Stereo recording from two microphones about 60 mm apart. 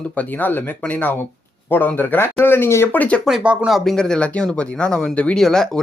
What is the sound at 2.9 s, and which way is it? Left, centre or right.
Speech, left.